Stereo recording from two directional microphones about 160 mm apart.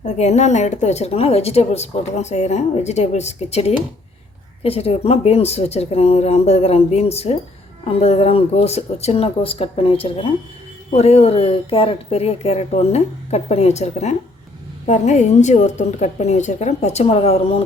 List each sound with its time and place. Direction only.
0.0 s speech: 45° left (ahead or behind)